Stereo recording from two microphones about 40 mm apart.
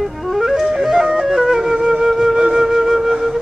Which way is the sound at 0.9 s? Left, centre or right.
Centre.